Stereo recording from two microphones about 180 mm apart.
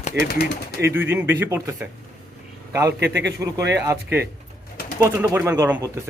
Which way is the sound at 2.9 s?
70° right (ahead or behind).